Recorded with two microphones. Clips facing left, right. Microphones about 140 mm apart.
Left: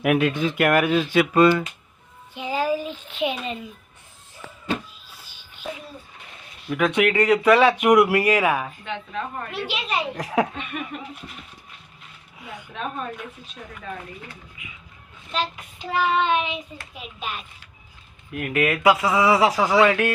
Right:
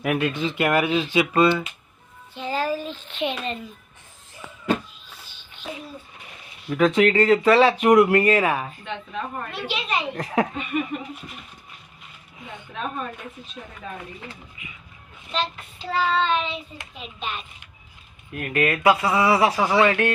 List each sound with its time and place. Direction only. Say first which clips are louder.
0.0 s speech: left 3 dB; 5° left (ahead or behind)
2.3 s child singing: left 2 dB; 10° left (ahead or behind)
5.1 s music: right 4 dB; 10° left (ahead or behind)
6.7 s child singing: right 2 dB; 5° left (ahead or behind)
8.8 s speech: left 1 dB; centre (ahead or behind)
9.5 s child singing: right 1 dB; 10° left (ahead or behind)
10.5 s speech: right 5 dB; 5° right (ahead or behind)
12.4 s speech: even; 5° left (ahead or behind)
15.3 s child singing: even; 10° left (ahead or behind)